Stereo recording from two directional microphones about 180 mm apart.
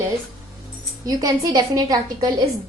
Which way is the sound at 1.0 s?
20° right (ahead or behind).